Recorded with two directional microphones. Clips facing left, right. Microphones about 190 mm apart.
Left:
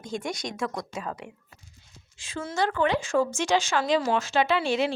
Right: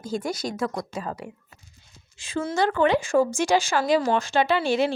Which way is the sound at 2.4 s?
55° right (ahead or behind).